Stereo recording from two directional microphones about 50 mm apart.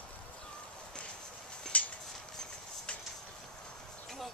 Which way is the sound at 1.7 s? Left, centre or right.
Left.